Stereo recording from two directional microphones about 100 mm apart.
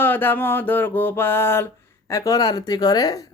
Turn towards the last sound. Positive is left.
turn(degrees=40)  # may be behind; listen again after turning